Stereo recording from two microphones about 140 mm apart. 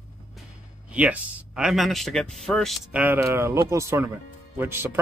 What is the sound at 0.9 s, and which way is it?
Speech, 10° right (ahead or behind).